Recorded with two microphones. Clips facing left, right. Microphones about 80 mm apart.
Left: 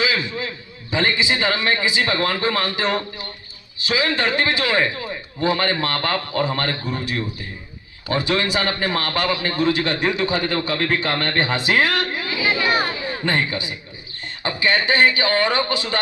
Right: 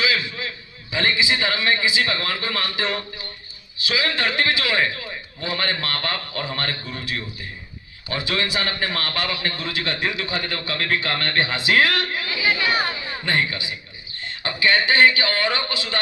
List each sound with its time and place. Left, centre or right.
0.0 s a sound: left
2.0 s a man's voice: left
6.8 s a man's voice: centre
12.4 s chatter: centre
13.2 s a man's voice: left